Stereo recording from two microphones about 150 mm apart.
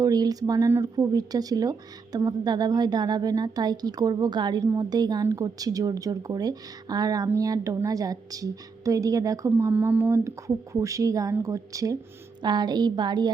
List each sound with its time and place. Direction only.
0.0 s a woman's voice: 25° right (ahead or behind)